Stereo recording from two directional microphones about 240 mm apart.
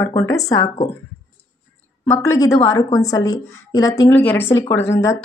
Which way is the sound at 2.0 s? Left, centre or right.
Centre.